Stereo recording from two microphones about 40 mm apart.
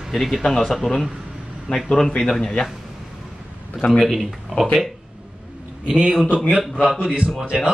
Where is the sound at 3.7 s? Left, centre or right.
Left.